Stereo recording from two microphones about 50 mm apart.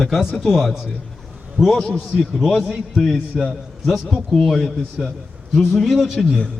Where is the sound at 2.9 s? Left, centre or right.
Centre.